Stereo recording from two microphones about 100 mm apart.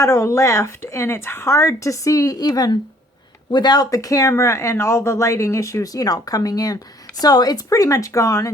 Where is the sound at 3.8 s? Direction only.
35° left (ahead or behind).